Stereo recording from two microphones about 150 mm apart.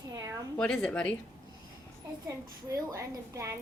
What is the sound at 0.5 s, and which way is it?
Speech, 5° left (ahead or behind).